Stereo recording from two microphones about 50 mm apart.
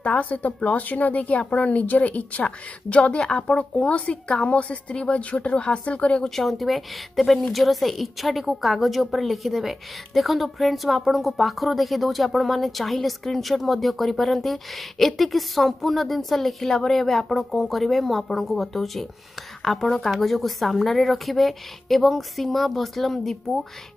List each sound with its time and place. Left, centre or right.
0.0 s a woman's voice: left
6.3 s a woman's voice: centre